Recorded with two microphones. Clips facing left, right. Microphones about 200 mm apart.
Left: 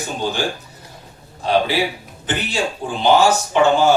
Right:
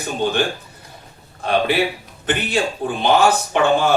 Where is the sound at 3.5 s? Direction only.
55° right (ahead or behind).